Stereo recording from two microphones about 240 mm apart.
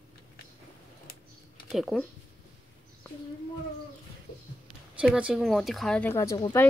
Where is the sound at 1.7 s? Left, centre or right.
Centre.